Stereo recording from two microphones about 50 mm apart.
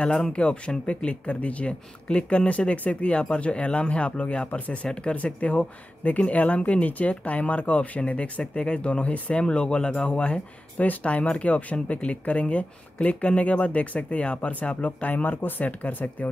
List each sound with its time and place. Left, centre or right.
0.0 s speech: centre
4.5 s speech: left
4.8 s speech: centre; by 16.3 s left